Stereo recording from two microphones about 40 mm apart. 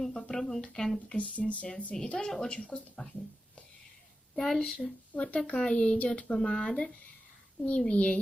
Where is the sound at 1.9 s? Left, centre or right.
Centre.